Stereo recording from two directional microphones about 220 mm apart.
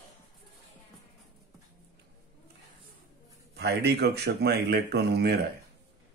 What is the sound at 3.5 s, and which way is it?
Speech, 50° right (ahead or behind).